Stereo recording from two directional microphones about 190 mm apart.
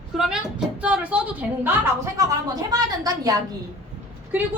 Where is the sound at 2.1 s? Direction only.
20° right (ahead or behind).